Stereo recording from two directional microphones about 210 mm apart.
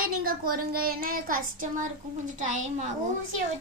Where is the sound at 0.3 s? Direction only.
45° right (ahead or behind).